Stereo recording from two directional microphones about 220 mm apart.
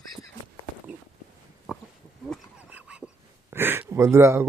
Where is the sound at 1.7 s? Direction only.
5° right (ahead or behind).